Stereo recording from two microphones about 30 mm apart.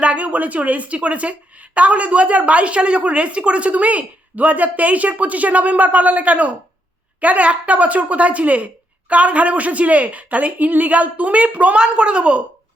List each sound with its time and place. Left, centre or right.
0.0 s a woman's voice: right
10.9 s a woman's voice: right
11.8 s speech: right